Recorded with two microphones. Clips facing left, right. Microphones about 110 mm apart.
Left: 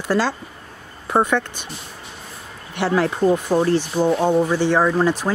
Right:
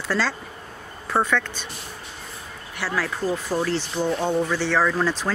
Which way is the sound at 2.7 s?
25° left (ahead or behind).